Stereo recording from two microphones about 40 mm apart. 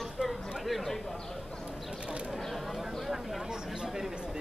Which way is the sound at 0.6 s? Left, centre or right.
Centre.